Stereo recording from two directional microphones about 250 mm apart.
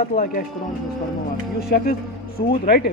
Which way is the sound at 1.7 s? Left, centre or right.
Left.